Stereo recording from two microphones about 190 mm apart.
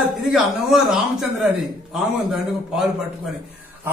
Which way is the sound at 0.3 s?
Centre (ahead or behind).